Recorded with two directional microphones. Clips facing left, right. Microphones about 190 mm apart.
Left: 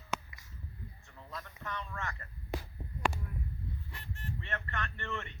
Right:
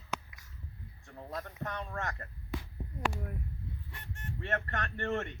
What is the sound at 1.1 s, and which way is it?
Speech, 45° right (ahead or behind).